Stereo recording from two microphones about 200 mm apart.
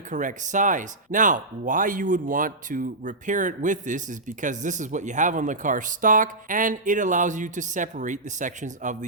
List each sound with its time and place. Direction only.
0.1 s speech: 40° right (ahead or behind)